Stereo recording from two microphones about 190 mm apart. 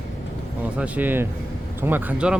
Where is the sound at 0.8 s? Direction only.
10° right (ahead or behind).